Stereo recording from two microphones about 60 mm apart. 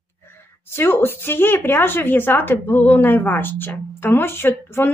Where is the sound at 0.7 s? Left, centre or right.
Left.